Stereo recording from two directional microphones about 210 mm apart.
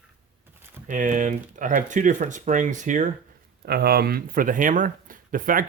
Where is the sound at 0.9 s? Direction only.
35° right (ahead or behind).